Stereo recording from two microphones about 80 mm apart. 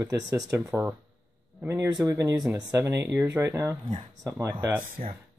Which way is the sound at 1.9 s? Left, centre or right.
Right.